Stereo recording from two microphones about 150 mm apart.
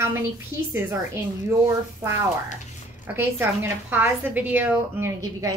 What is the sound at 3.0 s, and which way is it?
A woman's voice, 15° right (ahead or behind).